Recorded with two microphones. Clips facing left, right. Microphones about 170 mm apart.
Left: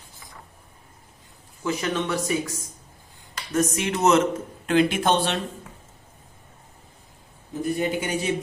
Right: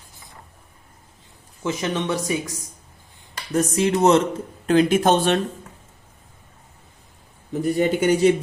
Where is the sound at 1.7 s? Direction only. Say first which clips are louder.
Right 2 dB; 20° right (ahead or behind).